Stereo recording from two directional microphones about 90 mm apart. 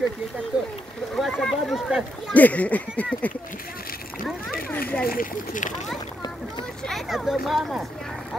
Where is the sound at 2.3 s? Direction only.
15° left (ahead or behind).